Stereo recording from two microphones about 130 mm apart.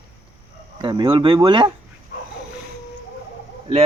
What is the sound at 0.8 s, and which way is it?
Speech, 35° right (ahead or behind).